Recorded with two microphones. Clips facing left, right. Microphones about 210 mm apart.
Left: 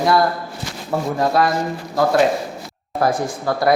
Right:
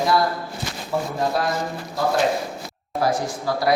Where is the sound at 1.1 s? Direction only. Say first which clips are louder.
Left 7 dB; 90° left.